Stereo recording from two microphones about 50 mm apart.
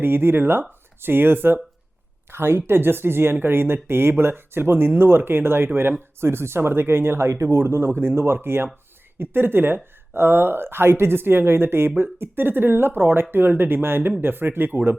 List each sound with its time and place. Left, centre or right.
0.0 s speech: right